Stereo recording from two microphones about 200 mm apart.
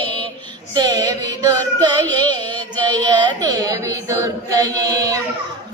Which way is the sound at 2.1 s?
20° right (ahead or behind).